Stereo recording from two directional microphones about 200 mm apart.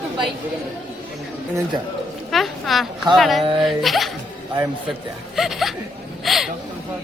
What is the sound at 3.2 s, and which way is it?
Speech, centre (ahead or behind).